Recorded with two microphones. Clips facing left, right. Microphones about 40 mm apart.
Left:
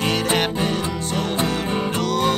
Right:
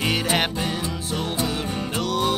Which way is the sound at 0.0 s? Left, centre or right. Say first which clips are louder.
Left 2 dB; centre.